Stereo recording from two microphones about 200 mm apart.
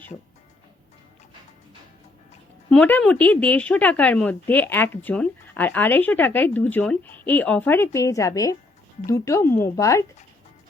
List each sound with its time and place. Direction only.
2.6 s speech: 5° left (ahead or behind)